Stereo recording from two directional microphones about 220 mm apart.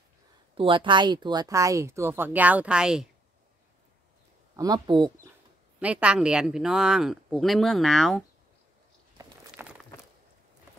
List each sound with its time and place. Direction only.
0.6 s speech: 20° right (ahead or behind); by 3.1 s 5° right (ahead or behind)
4.6 s speech: 20° right (ahead or behind)
5.8 s speech: 5° right (ahead or behind)
9.2 s a sound: 10° right (ahead or behind)